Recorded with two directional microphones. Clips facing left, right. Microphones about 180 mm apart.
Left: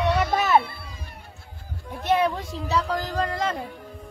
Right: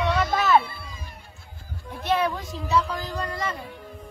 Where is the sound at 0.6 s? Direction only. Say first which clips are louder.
Even; 65° left (ahead or behind).